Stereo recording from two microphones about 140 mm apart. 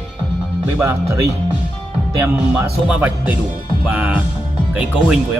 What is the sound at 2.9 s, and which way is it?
Speech, 10° right (ahead or behind).